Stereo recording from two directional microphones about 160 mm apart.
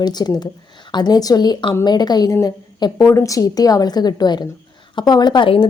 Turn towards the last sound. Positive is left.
turn(degrees=30)  # may be behind; listen again after turning